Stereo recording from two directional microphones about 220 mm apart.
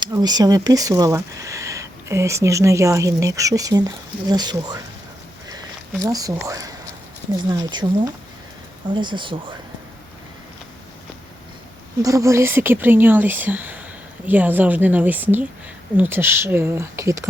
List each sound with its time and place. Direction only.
0.0 s speech: 20° right (ahead or behind)
6.0 s speech: 15° right (ahead or behind)
12.0 s speech: 15° right (ahead or behind)